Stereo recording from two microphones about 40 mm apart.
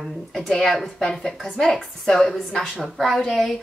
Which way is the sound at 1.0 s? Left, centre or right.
Centre.